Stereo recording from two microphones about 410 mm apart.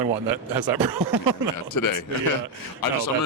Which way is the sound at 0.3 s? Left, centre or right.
Right.